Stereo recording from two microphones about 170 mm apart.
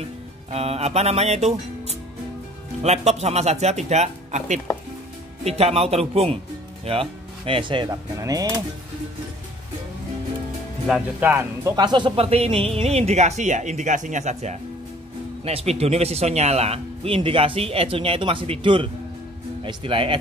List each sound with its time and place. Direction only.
0.5 s speech: 35° right (ahead or behind); by 8.5 s 20° right (ahead or behind)
10.9 s speech: 10° right (ahead or behind)
11.7 s speech: 25° right (ahead or behind)